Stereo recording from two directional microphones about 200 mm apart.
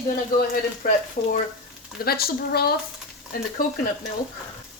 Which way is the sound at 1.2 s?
35° left (ahead or behind).